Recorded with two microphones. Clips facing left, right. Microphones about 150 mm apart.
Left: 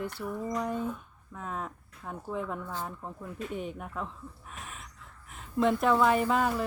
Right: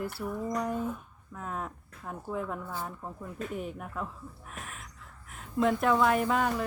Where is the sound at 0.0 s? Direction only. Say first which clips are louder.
Right 1 dB; 5° right (ahead or behind).